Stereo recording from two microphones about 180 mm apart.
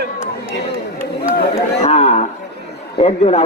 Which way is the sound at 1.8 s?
35° left (ahead or behind).